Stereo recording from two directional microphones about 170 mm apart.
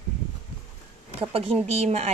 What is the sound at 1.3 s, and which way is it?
Speech, 35° right (ahead or behind).